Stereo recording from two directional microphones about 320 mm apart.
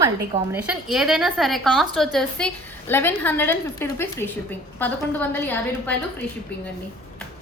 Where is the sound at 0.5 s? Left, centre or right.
Centre.